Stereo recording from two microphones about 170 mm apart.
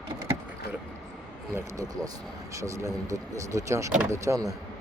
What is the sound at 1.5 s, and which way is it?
Speech, 20° right (ahead or behind).